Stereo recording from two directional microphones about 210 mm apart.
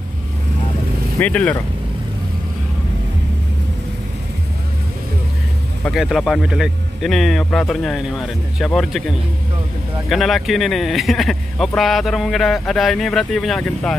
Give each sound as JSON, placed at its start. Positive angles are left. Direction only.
{"t": 1.2, "sound": "speech", "side_deg": 5}
{"t": 5.9, "sound": "speech", "side_deg": 0}
{"t": 10.0, "sound": "speech", "side_deg": 0}